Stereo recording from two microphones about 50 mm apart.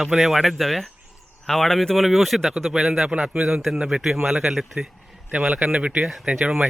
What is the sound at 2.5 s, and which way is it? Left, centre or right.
Speech, centre.